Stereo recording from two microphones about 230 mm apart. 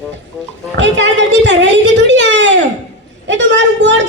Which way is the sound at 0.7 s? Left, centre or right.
Right.